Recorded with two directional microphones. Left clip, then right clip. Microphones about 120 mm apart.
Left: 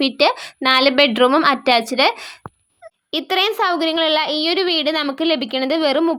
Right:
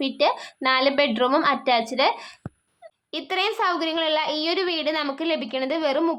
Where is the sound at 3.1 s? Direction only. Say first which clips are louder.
Left 6 dB; 45° left (ahead or behind).